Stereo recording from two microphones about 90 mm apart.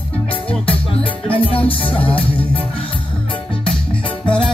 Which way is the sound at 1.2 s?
90° left.